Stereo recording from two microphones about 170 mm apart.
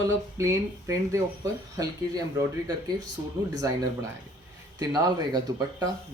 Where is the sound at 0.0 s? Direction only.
15° right (ahead or behind).